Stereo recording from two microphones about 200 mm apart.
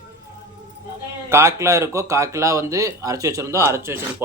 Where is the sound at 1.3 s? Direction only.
15° right (ahead or behind).